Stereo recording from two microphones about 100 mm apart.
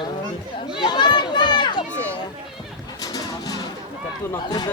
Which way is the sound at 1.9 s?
15° left (ahead or behind).